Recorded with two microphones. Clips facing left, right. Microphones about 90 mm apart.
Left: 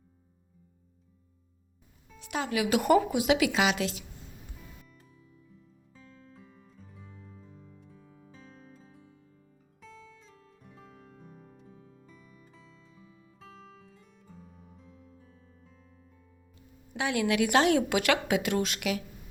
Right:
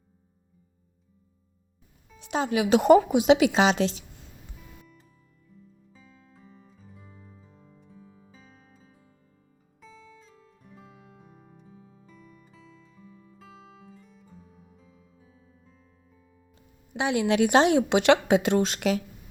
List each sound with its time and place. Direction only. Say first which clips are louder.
2.1 s a woman's voice: right 5 dB; 20° right (ahead or behind)
5.5 s music: right 3 dB; 5° right (ahead or behind)
17.0 s a woman's voice: right 4 dB; 25° right (ahead or behind)